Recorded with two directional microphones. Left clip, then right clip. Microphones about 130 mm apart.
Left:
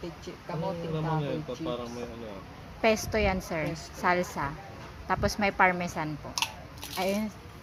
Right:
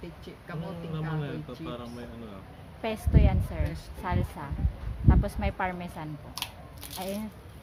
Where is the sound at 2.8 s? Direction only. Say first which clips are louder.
Left 6 dB; 25° left (ahead or behind).